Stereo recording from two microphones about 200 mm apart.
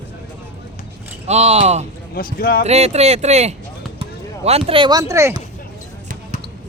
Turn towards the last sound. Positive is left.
turn(degrees=-15)  # may be behind; listen again after turning